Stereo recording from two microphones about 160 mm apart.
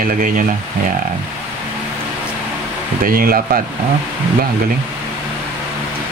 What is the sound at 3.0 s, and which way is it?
Speech, 65° right (ahead or behind).